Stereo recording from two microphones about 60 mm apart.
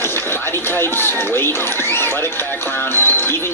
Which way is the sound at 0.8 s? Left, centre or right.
Left.